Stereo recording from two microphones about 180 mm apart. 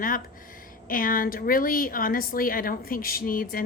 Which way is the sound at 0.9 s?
50° left (ahead or behind).